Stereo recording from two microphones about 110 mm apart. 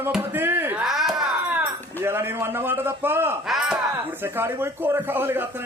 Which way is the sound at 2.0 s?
20° right (ahead or behind).